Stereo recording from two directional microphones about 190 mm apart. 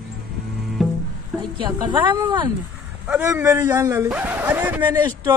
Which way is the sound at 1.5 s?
25° right (ahead or behind).